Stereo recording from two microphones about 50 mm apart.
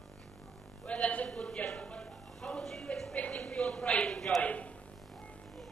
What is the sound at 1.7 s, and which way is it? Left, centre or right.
Music, left.